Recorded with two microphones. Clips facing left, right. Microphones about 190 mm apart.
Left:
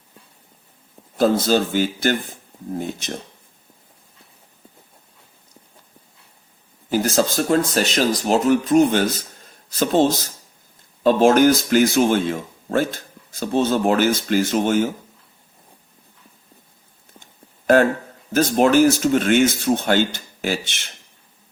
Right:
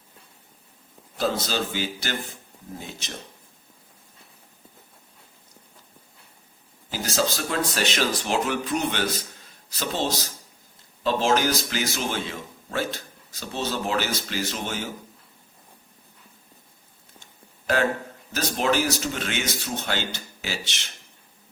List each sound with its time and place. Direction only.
1.2 s speech: 50° left (ahead or behind)
6.9 s speech: 55° left (ahead or behind)
18.3 s speech: 50° left (ahead or behind)